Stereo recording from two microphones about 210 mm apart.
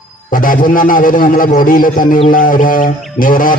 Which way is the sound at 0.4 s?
40° left (ahead or behind).